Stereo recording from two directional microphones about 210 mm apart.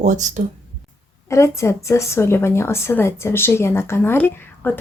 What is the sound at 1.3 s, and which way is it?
A woman's voice, 15° left (ahead or behind).